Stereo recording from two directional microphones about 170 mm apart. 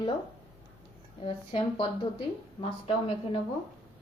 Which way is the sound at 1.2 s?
35° left (ahead or behind).